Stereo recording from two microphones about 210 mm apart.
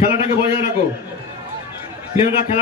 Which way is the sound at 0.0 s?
30° left (ahead or behind).